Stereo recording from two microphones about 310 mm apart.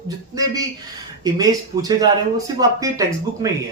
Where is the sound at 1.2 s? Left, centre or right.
Centre.